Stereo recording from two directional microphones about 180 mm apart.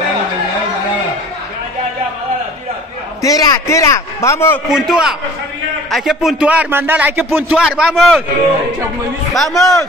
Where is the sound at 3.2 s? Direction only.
20° left (ahead or behind).